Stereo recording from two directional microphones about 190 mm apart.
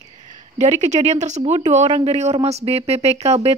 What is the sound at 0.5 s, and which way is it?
Speech, 40° right (ahead or behind).